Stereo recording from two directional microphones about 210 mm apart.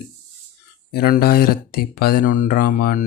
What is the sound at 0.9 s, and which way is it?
Speech, 50° left (ahead or behind).